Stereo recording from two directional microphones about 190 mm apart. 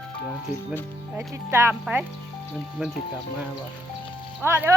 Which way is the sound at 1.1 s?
15° right (ahead or behind).